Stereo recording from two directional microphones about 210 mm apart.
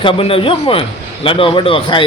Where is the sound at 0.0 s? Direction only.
25° left (ahead or behind).